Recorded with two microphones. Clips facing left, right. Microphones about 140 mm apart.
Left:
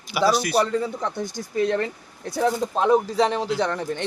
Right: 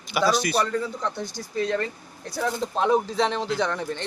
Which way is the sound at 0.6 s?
25° left (ahead or behind).